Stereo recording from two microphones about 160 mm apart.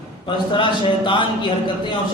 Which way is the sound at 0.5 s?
30° left (ahead or behind).